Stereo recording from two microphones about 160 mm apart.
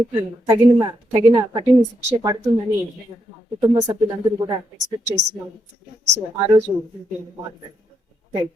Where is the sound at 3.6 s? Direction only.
25° right (ahead or behind).